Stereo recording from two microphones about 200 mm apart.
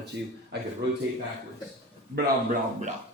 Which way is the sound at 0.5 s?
55° right (ahead or behind).